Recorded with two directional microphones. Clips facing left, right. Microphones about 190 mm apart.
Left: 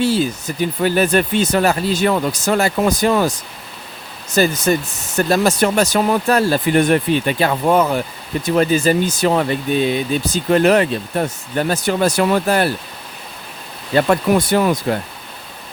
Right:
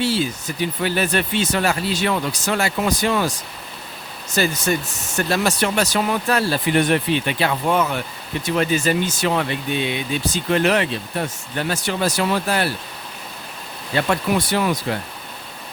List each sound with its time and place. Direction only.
0.0 s speech: 45° left (ahead or behind)
4.4 s speech: 35° left (ahead or behind)
13.9 s speech: 45° left (ahead or behind)